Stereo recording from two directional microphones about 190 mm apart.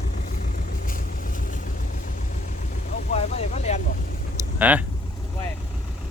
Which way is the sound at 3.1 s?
35° left (ahead or behind).